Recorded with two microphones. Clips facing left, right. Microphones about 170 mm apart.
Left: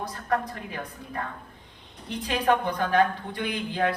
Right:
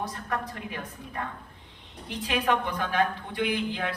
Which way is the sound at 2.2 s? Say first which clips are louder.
Left 3 dB; 40° left (ahead or behind).